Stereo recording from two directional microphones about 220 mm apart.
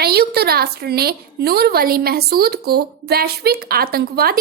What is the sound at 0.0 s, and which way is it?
A woman's voice, 45° right (ahead or behind).